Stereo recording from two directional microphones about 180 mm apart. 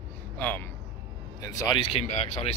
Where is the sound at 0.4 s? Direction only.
10° left (ahead or behind).